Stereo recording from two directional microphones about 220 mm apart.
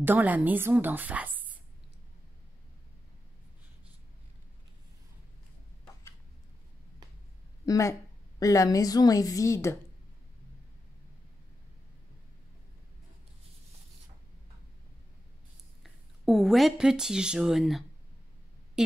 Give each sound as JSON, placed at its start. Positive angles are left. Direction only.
{"t": 0.0, "sound": "a woman's voice", "side_deg": -10}
{"t": 7.6, "sound": "a woman's voice", "side_deg": 15}
{"t": 15.8, "sound": "speech", "side_deg": 0}